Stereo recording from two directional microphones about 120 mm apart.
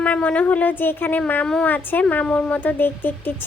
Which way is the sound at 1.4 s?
5° left (ahead or behind).